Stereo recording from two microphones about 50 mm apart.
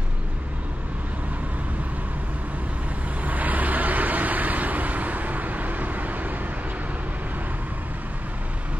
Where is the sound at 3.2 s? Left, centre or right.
Right.